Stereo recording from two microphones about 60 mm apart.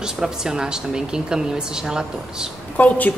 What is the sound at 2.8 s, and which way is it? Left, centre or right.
Speech, left.